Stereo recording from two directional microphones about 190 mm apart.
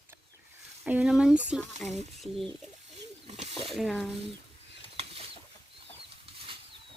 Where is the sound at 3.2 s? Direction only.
30° right (ahead or behind).